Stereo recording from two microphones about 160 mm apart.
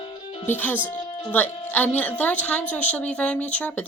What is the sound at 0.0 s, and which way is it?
Music, 35° left (ahead or behind).